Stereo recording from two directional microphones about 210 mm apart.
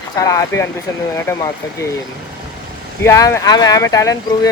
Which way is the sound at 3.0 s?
15° left (ahead or behind).